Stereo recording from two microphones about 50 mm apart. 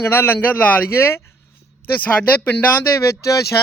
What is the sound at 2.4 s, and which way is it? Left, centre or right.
Speech, left.